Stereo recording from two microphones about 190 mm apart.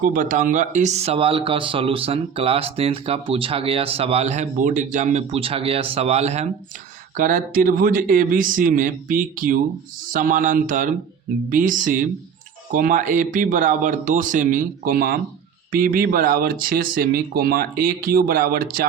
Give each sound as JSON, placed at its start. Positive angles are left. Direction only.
{"t": 0.0, "sound": "speech", "side_deg": -45}